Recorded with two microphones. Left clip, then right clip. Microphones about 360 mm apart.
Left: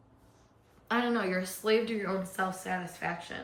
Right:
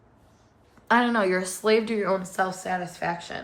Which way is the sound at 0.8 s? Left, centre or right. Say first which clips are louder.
Right 9 dB; centre.